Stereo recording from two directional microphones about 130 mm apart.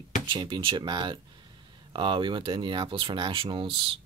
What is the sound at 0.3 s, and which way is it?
Speech, 35° right (ahead or behind).